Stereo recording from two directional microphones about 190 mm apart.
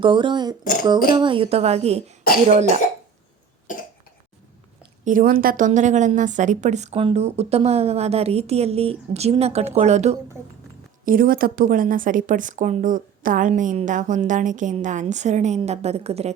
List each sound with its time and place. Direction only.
0.0 s a woman's voice: 25° right (ahead or behind)
5.0 s a woman's voice: 45° right (ahead or behind)
11.0 s a woman's voice: 50° right (ahead or behind)